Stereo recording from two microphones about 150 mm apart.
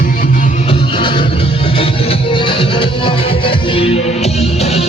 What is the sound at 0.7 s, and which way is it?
Music, 35° left (ahead or behind).